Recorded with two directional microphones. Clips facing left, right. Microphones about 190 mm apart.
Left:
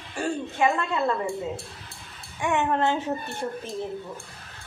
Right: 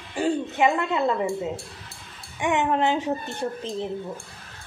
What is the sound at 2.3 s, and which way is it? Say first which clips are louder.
A child's voice: right 2 dB; 15° right (ahead or behind).